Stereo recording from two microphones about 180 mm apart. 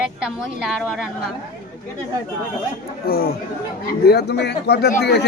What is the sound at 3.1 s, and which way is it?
Speech, 60° left (ahead or behind).